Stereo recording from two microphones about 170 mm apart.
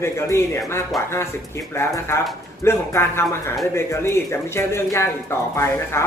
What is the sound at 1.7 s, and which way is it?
A man's voice, 15° left (ahead or behind).